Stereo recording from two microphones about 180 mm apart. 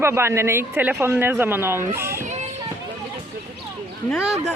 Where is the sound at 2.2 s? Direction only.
40° right (ahead or behind).